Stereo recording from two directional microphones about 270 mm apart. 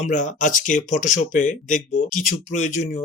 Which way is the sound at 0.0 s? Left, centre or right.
Left.